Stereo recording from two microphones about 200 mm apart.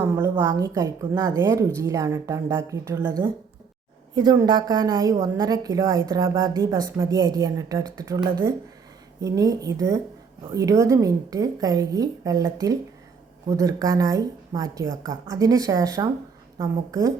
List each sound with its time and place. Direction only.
0.0 s a woman's voice: 10° right (ahead or behind)